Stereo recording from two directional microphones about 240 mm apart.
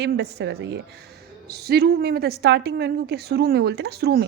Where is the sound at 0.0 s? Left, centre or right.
Right.